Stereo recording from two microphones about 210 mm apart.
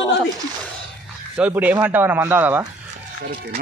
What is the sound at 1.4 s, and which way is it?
Speech, 10° right (ahead or behind).